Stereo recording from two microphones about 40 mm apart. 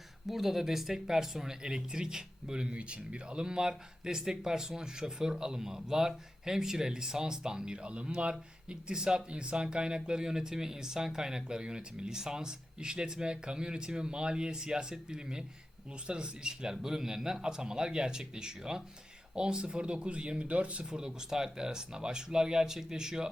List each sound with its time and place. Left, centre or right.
0.3 s speech: centre; by 21.0 s right
21.0 s speech: centre